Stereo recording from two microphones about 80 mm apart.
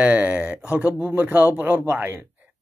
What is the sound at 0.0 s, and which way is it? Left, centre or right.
Speech, centre.